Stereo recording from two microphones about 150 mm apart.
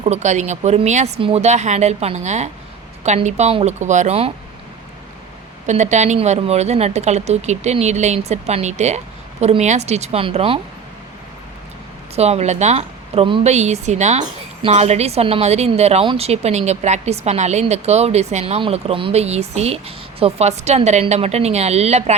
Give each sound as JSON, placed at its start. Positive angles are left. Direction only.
{"t": 0.0, "sound": "a woman's voice", "side_deg": -50}
{"t": 5.6, "sound": "a woman's voice", "side_deg": -50}
{"t": 12.1, "sound": "a woman's voice", "side_deg": -45}
{"t": 13.4, "sound": "a woman's voice", "side_deg": -50}